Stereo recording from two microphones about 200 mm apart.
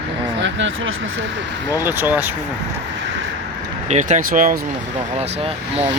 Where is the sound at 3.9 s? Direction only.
35° right (ahead or behind).